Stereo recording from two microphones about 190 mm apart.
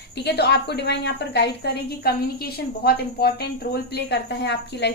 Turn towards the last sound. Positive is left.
turn(degrees=60)  # may be behind; listen again after turning